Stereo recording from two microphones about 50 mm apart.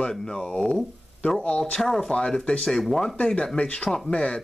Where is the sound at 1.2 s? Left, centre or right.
Left.